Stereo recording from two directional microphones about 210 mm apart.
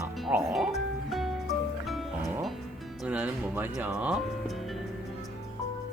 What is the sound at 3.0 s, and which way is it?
Speech, 5° right (ahead or behind).